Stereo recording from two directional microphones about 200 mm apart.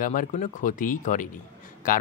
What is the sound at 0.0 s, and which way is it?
Speech, 40° left (ahead or behind).